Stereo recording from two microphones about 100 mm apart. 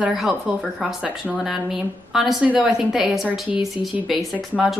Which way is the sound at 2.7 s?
5° right (ahead or behind).